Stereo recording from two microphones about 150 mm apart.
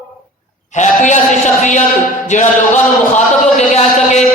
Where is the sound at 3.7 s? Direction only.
50° left (ahead or behind).